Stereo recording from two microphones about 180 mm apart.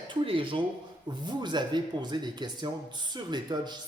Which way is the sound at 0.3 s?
30° right (ahead or behind).